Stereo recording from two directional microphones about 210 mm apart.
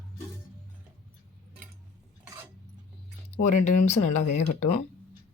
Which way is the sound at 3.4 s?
35° left (ahead or behind).